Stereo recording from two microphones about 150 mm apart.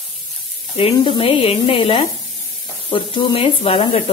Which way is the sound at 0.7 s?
35° left (ahead or behind).